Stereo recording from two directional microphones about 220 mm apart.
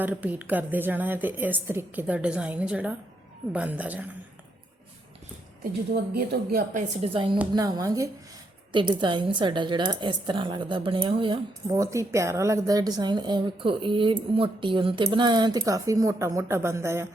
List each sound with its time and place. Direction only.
0.0 s a woman's voice: 5° right (ahead or behind)
5.9 s speech: 45° right (ahead or behind)
7.0 s a woman's voice: 25° right (ahead or behind)